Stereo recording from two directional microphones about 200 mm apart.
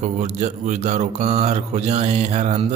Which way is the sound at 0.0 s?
35° right (ahead or behind).